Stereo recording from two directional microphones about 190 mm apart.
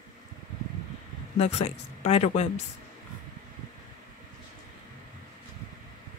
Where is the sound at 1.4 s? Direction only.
35° left (ahead or behind).